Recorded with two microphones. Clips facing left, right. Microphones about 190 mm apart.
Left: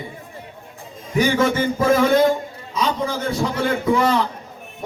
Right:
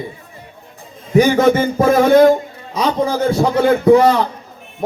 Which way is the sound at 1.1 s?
45° right (ahead or behind).